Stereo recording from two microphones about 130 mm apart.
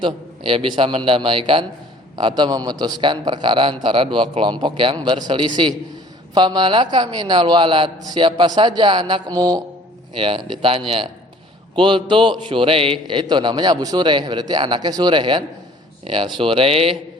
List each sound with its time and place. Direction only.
0.0 s a man's voice: 40° right (ahead or behind)